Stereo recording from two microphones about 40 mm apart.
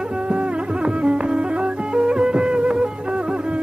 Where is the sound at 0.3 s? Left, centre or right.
Right.